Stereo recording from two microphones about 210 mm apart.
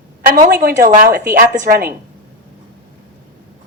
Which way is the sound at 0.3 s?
45° right (ahead or behind).